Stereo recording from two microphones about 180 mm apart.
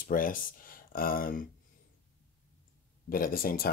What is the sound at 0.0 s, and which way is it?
Speech, 50° left (ahead or behind).